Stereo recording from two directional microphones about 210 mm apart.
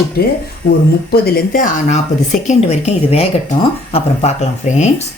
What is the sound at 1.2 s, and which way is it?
Speech, 40° left (ahead or behind).